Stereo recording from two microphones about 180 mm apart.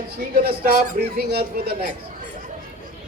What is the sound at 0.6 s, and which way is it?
Speech, 60° right (ahead or behind).